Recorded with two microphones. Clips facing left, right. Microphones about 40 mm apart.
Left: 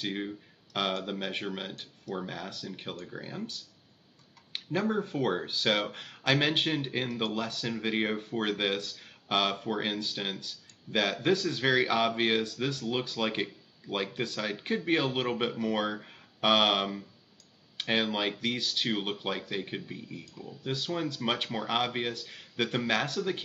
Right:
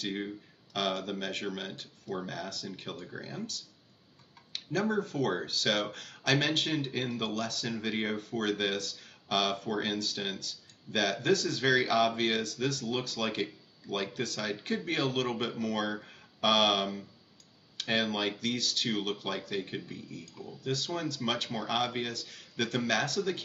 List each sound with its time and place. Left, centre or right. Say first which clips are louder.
0.0 s speech: left 1 dB; centre